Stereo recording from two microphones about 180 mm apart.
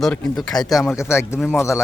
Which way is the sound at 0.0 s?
Centre (ahead or behind).